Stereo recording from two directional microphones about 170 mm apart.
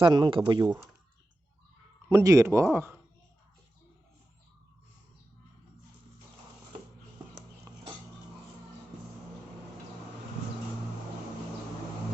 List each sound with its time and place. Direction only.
0.0 s speech: 30° right (ahead or behind)
2.0 s speech: 15° right (ahead or behind)